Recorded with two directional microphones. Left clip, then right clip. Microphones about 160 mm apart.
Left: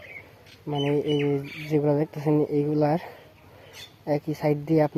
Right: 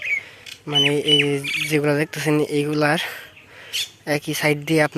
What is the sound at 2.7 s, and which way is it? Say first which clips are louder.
Speech: right 6 dB; 10° right (ahead or behind).